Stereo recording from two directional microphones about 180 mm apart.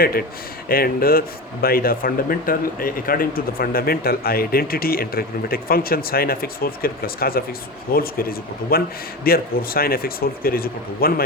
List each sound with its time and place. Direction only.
0.0 s speech: 55° left (ahead or behind)